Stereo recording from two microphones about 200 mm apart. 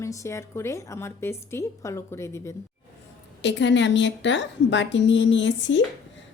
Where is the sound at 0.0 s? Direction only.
15° left (ahead or behind).